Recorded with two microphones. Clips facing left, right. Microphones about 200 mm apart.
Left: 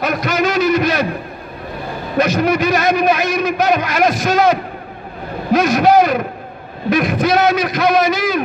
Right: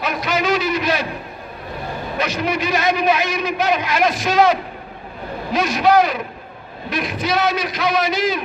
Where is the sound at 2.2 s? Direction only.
45° left (ahead or behind).